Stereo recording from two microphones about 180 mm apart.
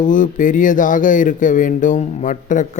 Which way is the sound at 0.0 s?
45° left (ahead or behind).